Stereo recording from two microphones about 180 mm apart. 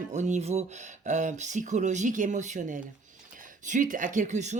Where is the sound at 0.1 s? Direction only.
40° right (ahead or behind).